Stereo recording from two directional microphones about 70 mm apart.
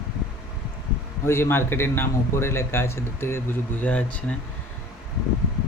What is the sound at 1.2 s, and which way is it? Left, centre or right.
A man's voice, left.